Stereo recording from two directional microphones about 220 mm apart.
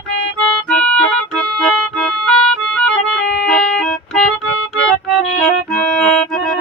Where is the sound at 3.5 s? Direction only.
Centre (ahead or behind).